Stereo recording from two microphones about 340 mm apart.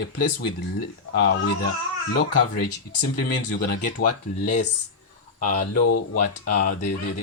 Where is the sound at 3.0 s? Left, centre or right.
Left.